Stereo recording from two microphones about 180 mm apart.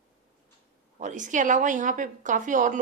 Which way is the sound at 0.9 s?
45° right (ahead or behind).